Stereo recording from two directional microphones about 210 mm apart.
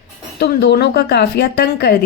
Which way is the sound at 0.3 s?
50° left (ahead or behind).